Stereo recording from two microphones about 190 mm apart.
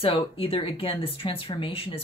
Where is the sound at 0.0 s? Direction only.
30° left (ahead or behind).